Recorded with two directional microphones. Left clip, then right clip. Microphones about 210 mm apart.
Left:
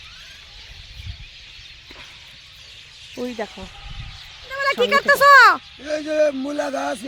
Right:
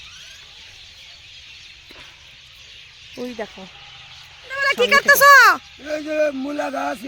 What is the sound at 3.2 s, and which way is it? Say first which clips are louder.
Speech: left 2 dB; 25° left (ahead or behind).